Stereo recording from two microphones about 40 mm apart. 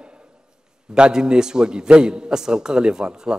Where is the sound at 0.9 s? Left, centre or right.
Right.